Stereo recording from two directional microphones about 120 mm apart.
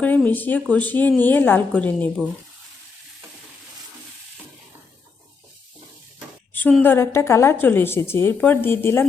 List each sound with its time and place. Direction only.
0.0 s speech: 15° left (ahead or behind)
6.5 s a sound: 15° left (ahead or behind)
6.8 s a woman's voice: 20° left (ahead or behind)